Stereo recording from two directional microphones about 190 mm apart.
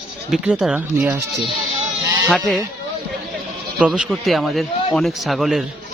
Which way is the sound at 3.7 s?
5° right (ahead or behind).